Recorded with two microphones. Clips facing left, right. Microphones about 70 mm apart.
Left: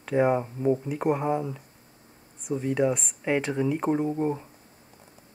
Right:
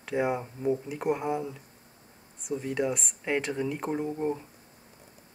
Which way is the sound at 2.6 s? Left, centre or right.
Centre.